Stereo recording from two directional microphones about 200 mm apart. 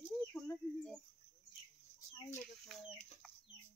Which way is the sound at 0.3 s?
5° left (ahead or behind).